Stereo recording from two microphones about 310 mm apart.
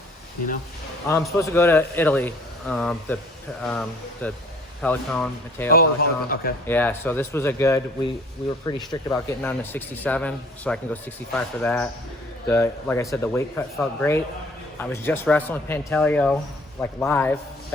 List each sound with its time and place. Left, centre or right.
1.0 s speech: centre
5.7 s a man's voice: left
6.7 s speech: centre